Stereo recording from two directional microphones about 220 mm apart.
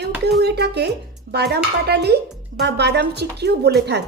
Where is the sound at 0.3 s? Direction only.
50° right (ahead or behind).